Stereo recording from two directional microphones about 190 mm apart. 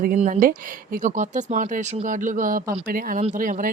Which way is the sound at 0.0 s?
45° right (ahead or behind).